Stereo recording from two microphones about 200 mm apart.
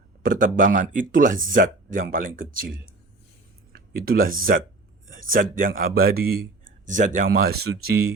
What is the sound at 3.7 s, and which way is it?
A man's voice, 45° right (ahead or behind).